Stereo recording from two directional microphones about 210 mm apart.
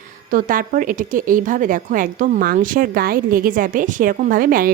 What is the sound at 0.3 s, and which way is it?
A woman's voice, 40° right (ahead or behind).